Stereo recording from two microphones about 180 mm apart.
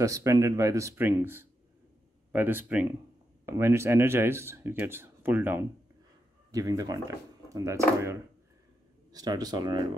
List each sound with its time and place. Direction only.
0.0 s speech: 20° right (ahead or behind)
9.1 s speech: 20° right (ahead or behind)